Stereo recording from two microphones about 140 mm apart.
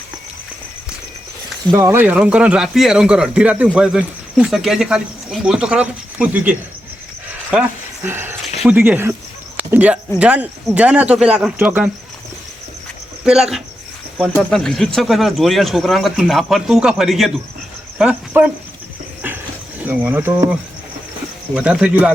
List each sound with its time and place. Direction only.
1.7 s a man's voice: 15° right (ahead or behind)
8.0 s a man's voice: 15° right (ahead or behind)
13.2 s speech: 5° right (ahead or behind)
19.8 s a man's voice: 15° right (ahead or behind)
21.5 s a man's voice: 5° right (ahead or behind)